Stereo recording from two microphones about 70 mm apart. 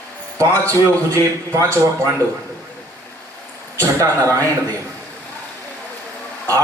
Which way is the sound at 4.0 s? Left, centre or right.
Right.